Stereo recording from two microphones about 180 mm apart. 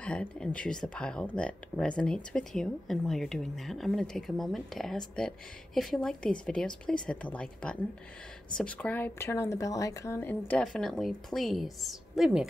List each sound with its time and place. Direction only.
0.0 s a woman's voice: 5° left (ahead or behind)